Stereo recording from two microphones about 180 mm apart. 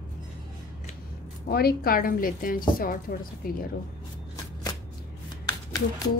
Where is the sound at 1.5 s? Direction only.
60° left (ahead or behind).